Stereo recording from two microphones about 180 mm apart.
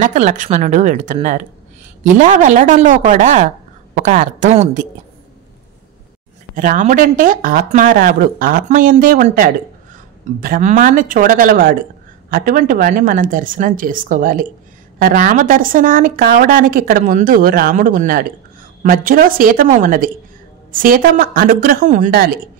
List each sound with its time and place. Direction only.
0.0 s a woman's voice: 45° right (ahead or behind)
6.5 s a woman's voice: 50° right (ahead or behind)